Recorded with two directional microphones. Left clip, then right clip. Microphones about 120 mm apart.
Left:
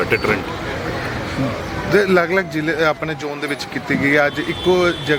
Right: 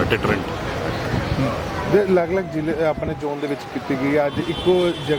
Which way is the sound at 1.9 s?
45° left (ahead or behind).